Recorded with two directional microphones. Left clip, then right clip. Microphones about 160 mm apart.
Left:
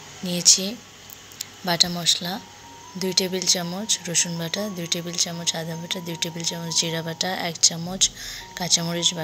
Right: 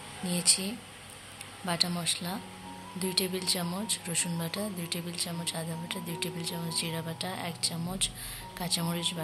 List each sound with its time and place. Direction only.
0.3 s speech: 25° left (ahead or behind)
1.9 s speech: 20° left (ahead or behind)